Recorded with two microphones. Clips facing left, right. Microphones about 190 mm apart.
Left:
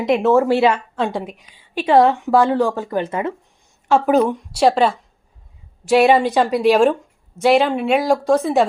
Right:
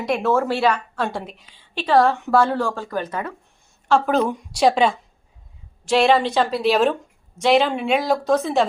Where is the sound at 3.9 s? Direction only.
10° left (ahead or behind).